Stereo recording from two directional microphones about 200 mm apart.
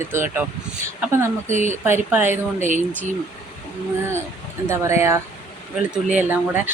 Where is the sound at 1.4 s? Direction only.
40° right (ahead or behind).